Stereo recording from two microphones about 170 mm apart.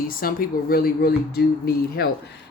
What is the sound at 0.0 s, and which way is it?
Speech, 60° left (ahead or behind).